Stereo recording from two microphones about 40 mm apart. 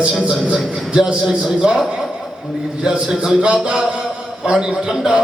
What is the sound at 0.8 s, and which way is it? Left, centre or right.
Speech, centre.